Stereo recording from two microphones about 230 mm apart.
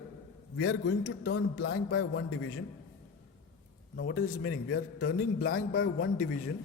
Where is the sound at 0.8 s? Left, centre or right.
Left.